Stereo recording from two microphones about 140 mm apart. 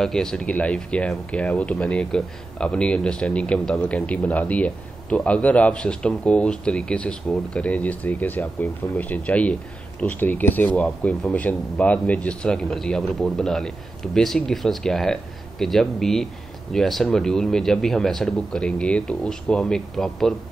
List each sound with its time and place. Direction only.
0.0 s speech: 5° left (ahead or behind)